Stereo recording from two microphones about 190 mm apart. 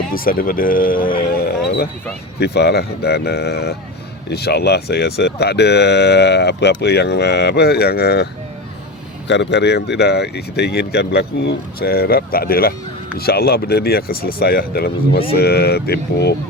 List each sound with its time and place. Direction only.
0.1 s speech: 50° left (ahead or behind)
9.2 s speech: 70° left (ahead or behind)